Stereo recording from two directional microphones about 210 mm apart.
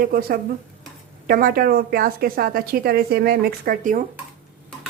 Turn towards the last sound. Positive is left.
turn(degrees=-40)  # may be behind; listen again after turning